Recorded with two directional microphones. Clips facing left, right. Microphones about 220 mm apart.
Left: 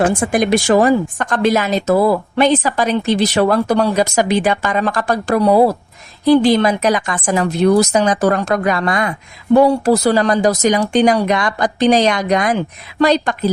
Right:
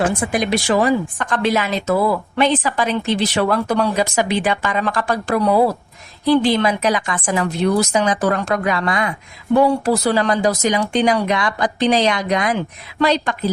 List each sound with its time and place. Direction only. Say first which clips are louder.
0.2 s a woman's voice: left 4 dB; 50° left (ahead or behind)